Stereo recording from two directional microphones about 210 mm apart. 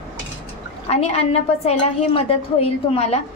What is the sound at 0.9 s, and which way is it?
A woman's voice, 30° left (ahead or behind).